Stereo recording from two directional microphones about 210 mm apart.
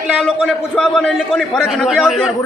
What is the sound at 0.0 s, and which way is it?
A man's voice, centre (ahead or behind).